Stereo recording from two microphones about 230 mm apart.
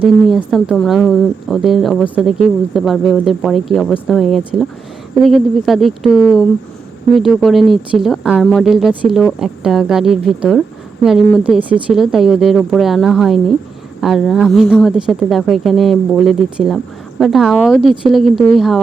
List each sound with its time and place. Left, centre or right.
0.3 s speech: centre